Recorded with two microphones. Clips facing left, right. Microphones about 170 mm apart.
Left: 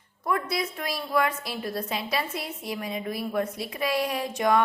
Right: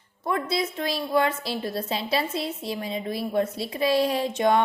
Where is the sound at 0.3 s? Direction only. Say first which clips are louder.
Right 2 dB; 25° right (ahead or behind).